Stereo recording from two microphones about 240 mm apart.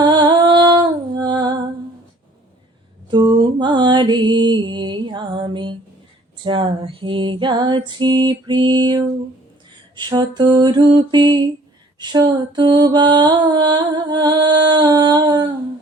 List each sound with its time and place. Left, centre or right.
0.0 s music: centre
3.1 s mantra: centre
6.4 s female singing: right
11.9 s mantra: centre